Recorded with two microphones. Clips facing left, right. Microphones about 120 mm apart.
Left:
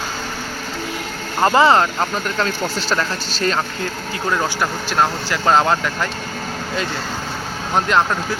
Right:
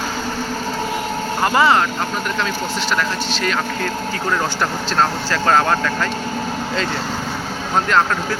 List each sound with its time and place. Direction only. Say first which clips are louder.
1.5 s speech: left 2 dB; 30° left (ahead or behind)
2.9 s speech: right 1 dB; 35° left (ahead or behind)
4.9 s speech: even; 20° left (ahead or behind)
7.9 s speech: right 1 dB; 20° left (ahead or behind)